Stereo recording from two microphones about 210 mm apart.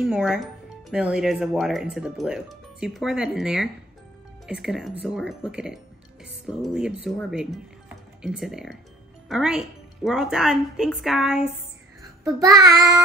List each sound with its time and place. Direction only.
0.0 s speech: 5° right (ahead or behind)
12.3 s child singing: 15° right (ahead or behind)